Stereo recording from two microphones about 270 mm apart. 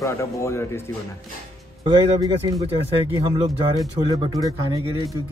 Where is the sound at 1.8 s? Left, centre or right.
Centre.